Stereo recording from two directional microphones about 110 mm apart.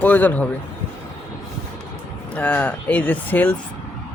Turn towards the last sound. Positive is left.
turn(degrees=15)  # may be behind; listen again after turning